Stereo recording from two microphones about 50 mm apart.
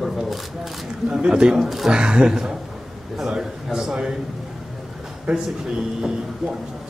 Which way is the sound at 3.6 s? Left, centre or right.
Centre.